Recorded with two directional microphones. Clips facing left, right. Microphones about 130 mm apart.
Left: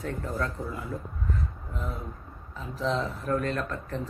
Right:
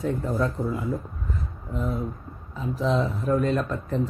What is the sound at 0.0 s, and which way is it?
Speech, 20° right (ahead or behind).